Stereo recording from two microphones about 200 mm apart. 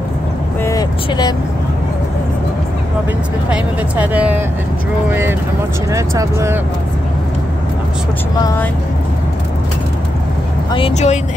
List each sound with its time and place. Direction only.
0.7 s vehicle: 20° left (ahead or behind)
3.4 s speech: 10° right (ahead or behind)
5.9 s speech: 15° right (ahead or behind)
10.7 s speech: 30° left (ahead or behind)